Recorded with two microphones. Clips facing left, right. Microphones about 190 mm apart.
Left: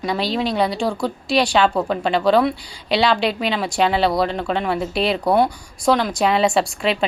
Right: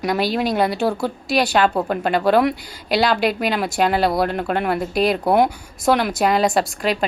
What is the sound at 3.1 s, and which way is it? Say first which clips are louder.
Speech: right 1 dB; 50° right (ahead or behind).